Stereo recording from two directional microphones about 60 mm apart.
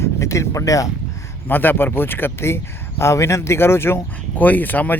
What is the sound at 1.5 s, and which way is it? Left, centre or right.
Speech, left.